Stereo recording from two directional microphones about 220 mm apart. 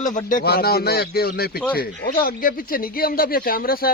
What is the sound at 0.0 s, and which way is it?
A man's voice, 35° left (ahead or behind).